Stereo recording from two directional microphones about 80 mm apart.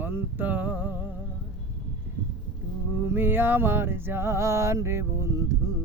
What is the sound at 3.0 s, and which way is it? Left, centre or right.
Music, right.